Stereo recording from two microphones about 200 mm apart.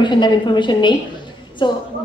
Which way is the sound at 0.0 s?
25° left (ahead or behind).